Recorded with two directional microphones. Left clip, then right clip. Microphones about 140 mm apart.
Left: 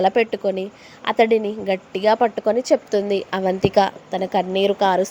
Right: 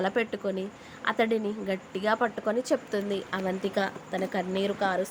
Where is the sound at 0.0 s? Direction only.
40° left (ahead or behind).